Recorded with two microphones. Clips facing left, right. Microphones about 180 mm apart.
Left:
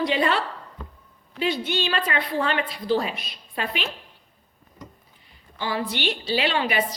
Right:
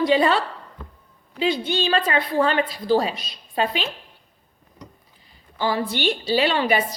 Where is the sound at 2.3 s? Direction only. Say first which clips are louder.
Right 6 dB; 35° right (ahead or behind).